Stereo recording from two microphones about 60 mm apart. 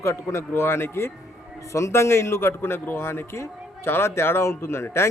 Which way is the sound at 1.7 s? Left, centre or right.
Left.